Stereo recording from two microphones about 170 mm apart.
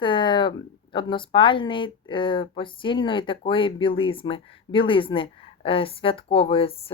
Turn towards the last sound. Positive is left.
turn(degrees=35)  # may be behind; listen again after turning